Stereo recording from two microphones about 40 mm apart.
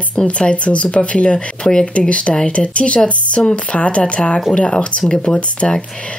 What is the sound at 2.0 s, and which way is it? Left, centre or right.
Speech, left.